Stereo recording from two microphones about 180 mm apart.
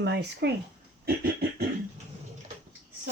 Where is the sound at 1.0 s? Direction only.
60° right (ahead or behind).